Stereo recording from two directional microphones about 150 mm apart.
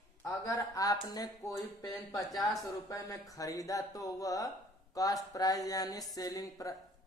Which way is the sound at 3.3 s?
25° left (ahead or behind).